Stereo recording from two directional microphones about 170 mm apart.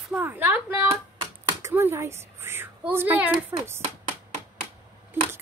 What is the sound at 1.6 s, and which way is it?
A woman's voice, 15° right (ahead or behind).